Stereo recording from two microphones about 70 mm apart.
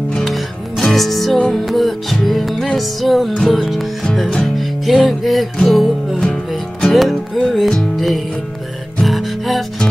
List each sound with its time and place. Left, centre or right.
0.1 s music: centre